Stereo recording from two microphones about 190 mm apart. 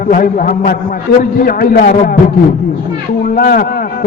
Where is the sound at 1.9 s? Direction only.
40° left (ahead or behind).